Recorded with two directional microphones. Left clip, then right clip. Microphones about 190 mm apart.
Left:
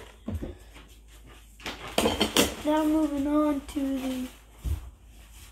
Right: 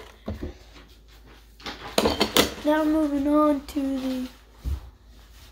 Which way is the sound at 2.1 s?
30° right (ahead or behind).